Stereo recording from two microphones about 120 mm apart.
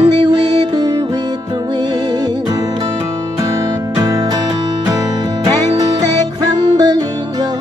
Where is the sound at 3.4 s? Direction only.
30° right (ahead or behind).